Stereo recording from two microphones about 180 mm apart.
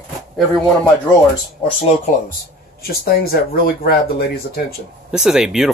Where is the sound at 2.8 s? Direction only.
55° left (ahead or behind).